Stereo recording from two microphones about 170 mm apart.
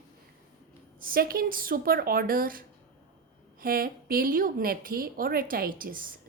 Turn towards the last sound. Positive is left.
turn(degrees=-55)  # may be behind; listen again after turning